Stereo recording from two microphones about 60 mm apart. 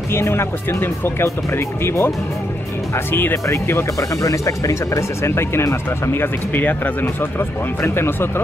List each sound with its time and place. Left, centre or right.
0.1 s speech: left
2.9 s speech: left
3.4 s speech: left
4.2 s speech: left